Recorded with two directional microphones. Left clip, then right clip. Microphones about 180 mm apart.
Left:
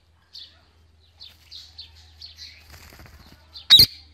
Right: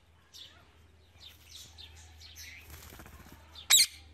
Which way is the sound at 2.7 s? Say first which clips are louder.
Left 6 dB; 30° left (ahead or behind).